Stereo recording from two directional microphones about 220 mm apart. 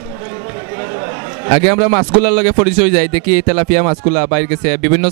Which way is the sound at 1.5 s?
15° right (ahead or behind).